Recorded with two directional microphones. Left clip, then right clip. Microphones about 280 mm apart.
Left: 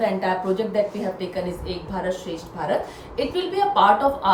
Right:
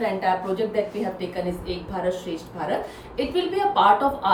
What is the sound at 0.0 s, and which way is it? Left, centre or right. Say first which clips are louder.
A woman's voice: left 1 dB; centre.